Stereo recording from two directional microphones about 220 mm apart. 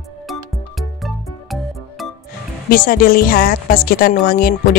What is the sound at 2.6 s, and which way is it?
A woman's voice, 40° left (ahead or behind).